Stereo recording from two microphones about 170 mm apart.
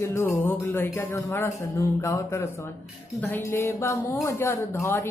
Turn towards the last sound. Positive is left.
turn(degrees=15)  # may be behind; listen again after turning